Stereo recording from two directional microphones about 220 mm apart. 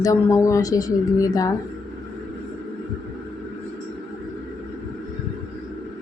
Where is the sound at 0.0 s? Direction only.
15° left (ahead or behind).